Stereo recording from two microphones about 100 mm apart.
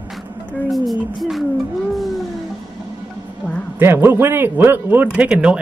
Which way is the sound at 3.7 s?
20° right (ahead or behind).